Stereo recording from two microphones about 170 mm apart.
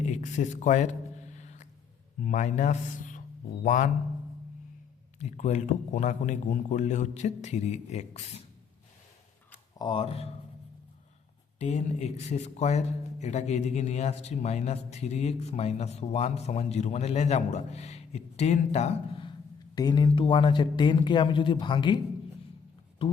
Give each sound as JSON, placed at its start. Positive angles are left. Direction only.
{"t": 0.0, "sound": "a sound", "side_deg": 45}
{"t": 2.2, "sound": "a man's voice", "side_deg": 45}
{"t": 5.2, "sound": "a man's voice", "side_deg": 45}
{"t": 9.7, "sound": "speech", "side_deg": 30}
{"t": 11.6, "sound": "speech", "side_deg": 40}
{"t": 19.7, "sound": "speech", "side_deg": 25}